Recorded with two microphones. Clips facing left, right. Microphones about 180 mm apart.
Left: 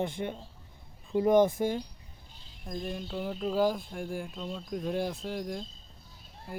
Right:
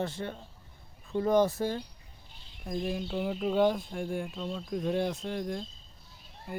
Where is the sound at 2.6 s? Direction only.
5° right (ahead or behind).